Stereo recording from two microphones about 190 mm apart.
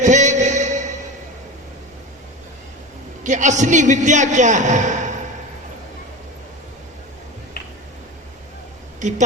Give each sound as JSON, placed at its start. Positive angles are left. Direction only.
{"t": 0.0, "sound": "a sound", "side_deg": -40}
{"t": 3.2, "sound": "a man's voice", "side_deg": -40}
{"t": 9.0, "sound": "speech", "side_deg": -40}